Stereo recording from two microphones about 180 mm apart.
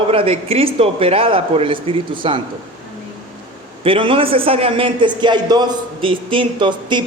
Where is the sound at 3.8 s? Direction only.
30° right (ahead or behind).